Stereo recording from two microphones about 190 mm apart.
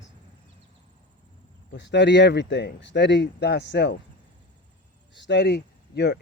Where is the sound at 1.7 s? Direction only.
65° left (ahead or behind).